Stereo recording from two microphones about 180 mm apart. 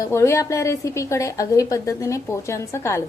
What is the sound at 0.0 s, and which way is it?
A woman's voice, 15° left (ahead or behind).